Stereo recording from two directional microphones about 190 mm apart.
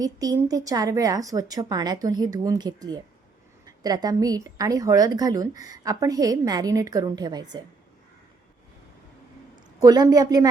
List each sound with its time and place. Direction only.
0.0 s a woman's voice: 20° right (ahead or behind)
9.8 s a woman's voice: 20° right (ahead or behind)